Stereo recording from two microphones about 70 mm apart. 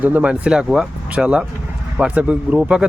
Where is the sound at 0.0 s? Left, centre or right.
Right.